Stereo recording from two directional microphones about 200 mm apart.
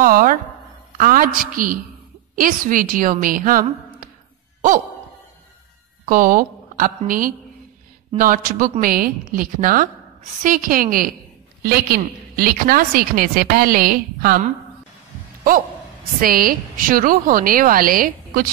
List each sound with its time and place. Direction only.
0.0 s a woman's voice: 45° right (ahead or behind)
6.0 s a woman's voice: 45° right (ahead or behind)
16.2 s a woman's voice: 45° right (ahead or behind)